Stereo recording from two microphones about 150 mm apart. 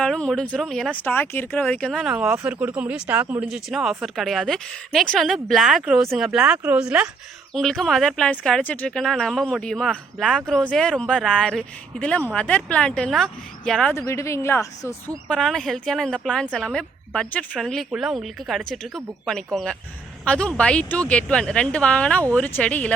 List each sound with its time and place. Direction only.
0.0 s speech: 5° left (ahead or behind)
13.9 s speech: 20° left (ahead or behind)
15.3 s speech: 5° left (ahead or behind)